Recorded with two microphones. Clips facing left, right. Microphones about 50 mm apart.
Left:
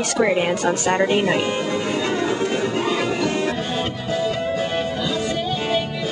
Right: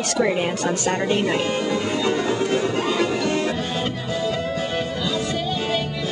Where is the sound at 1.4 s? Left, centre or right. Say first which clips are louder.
Even; centre.